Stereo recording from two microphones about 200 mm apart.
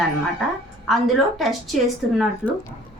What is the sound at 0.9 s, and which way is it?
Speech, centre (ahead or behind).